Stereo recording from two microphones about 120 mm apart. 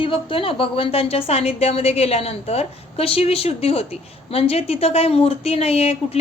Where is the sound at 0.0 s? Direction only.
50° left (ahead or behind).